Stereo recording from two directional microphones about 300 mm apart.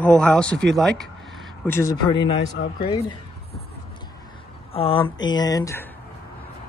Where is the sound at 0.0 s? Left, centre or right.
Centre.